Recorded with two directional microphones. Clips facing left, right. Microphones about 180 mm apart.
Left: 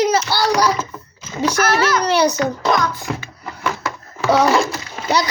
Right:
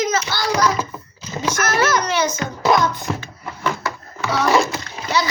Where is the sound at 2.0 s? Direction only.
35° left (ahead or behind).